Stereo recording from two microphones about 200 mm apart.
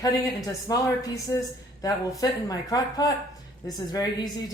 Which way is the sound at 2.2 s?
20° left (ahead or behind).